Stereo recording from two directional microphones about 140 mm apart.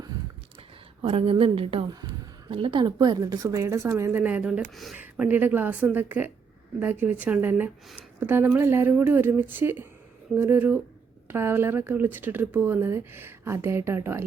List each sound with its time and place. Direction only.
1.0 s a woman's voice: 40° right (ahead or behind); by 14.3 s 15° right (ahead or behind)